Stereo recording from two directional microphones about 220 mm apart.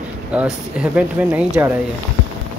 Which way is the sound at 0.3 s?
5° right (ahead or behind).